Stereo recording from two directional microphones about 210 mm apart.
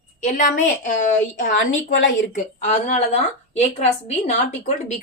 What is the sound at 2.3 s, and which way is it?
A woman's voice, 35° left (ahead or behind).